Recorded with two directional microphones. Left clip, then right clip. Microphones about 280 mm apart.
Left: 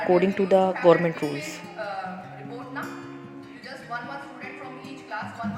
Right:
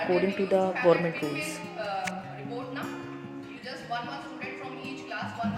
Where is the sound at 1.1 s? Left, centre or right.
Centre.